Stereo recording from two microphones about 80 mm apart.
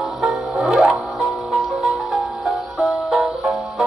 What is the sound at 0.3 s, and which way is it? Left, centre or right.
Music, centre.